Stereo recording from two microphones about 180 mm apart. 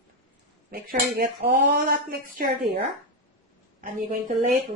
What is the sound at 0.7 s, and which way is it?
Speech, 50° right (ahead or behind).